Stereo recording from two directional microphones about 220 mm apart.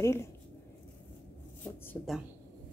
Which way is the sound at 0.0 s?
10° left (ahead or behind).